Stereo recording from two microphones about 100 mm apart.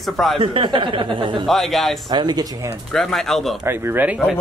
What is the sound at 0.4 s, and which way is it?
Speech, 55° right (ahead or behind).